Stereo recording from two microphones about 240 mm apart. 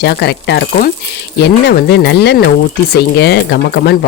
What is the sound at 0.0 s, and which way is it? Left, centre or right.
Speech, left.